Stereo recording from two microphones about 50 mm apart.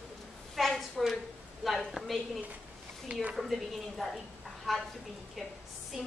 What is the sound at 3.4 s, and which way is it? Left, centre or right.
Speech, centre.